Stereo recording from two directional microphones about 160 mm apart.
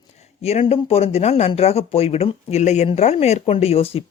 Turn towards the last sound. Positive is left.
turn(degrees=35)  # may be behind; listen again after turning